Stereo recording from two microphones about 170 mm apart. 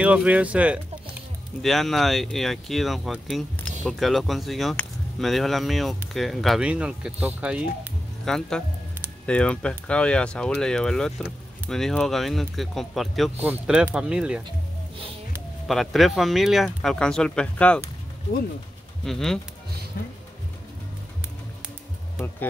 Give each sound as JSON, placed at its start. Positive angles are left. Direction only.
{"t": 0.0, "sound": "speech", "side_deg": -5}
{"t": 8.3, "sound": "speech", "side_deg": 5}
{"t": 15.7, "sound": "speech", "side_deg": 0}
{"t": 19.0, "sound": "speech", "side_deg": 0}
{"t": 19.9, "sound": "speech", "side_deg": 60}